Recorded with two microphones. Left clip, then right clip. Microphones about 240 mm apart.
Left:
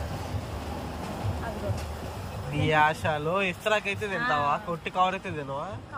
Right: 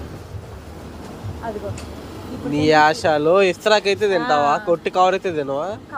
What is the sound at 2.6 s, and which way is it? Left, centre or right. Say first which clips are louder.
Speech: right 9 dB; right.